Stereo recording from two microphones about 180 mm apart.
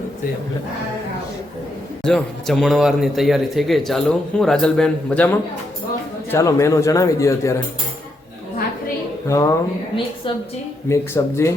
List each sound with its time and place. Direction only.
2.0 s a man's voice: 5° left (ahead or behind)
9.2 s a man's voice: 20° left (ahead or behind)